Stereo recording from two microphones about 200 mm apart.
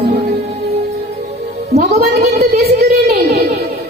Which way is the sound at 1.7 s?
50° right (ahead or behind).